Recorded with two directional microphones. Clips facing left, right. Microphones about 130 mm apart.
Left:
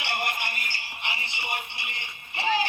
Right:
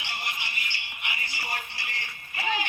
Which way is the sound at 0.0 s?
60° left (ahead or behind).